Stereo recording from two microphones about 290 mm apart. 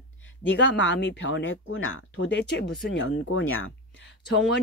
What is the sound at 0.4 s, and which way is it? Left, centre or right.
Speech, left.